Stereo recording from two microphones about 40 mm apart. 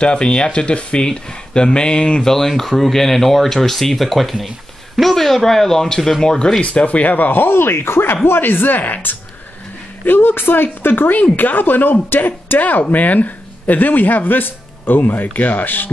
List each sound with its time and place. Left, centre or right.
0.0 s speech: left
2.2 s speech: centre
6.6 s speech: left
7.4 s speech: left
8.3 s speech: left
10.0 s speech: left